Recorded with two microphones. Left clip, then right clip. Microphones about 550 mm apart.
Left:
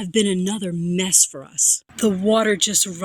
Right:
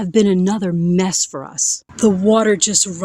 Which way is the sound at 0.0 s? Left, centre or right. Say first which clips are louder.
Right 5 dB; left.